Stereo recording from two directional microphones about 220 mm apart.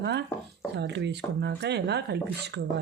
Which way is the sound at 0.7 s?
50° right (ahead or behind).